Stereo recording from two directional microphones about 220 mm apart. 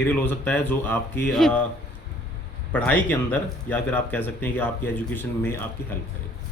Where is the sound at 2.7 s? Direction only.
5° left (ahead or behind).